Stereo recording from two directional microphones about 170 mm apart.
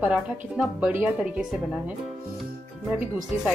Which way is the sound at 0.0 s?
5° right (ahead or behind).